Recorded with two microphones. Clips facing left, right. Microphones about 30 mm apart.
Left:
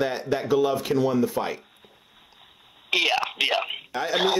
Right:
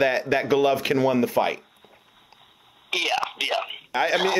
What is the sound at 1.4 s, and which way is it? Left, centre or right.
Speech, right.